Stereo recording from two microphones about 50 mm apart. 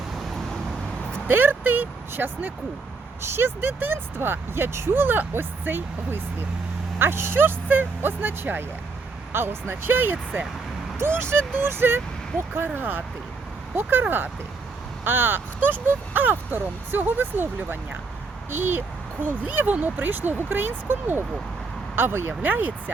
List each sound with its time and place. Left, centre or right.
1.3 s speech: right
3.2 s speech: right
10.9 s speech: right
14.0 s speech: right
22.4 s speech: right